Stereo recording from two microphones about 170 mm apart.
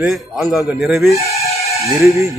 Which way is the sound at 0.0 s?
Centre (ahead or behind).